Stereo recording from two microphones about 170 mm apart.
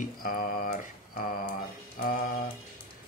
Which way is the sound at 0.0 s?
55° left (ahead or behind).